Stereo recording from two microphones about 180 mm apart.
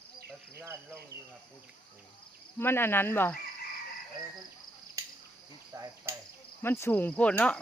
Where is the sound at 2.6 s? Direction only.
10° left (ahead or behind).